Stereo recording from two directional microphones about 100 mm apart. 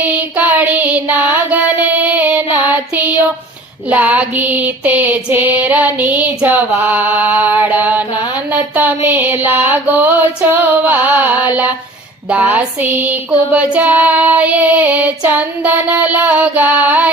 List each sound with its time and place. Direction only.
0.0 s child singing: 15° right (ahead or behind)
3.8 s female singing: 15° right (ahead or behind)